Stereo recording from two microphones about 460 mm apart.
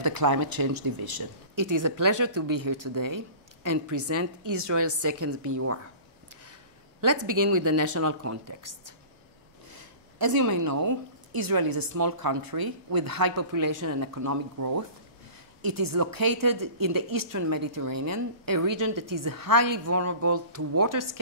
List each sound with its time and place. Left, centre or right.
0.0 s a woman's voice: right
7.0 s a woman's voice: right
19.8 s a woman's voice: right